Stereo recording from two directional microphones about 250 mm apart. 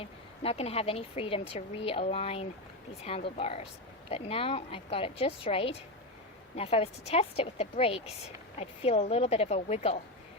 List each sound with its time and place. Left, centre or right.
0.0 s speech: left